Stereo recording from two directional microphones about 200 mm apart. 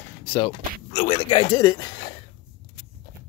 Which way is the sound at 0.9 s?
40° left (ahead or behind).